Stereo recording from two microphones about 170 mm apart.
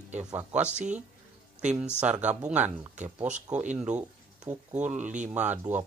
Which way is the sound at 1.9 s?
10° right (ahead or behind).